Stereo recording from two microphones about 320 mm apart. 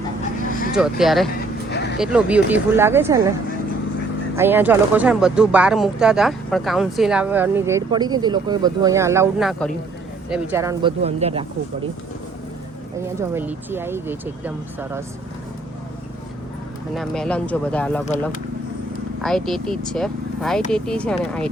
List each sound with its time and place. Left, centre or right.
0.7 s speech: centre
1.7 s a sound: left
2.0 s speech: centre
4.4 s speech: centre
13.0 s speech: centre
16.9 s speech: centre
19.2 s speech: centre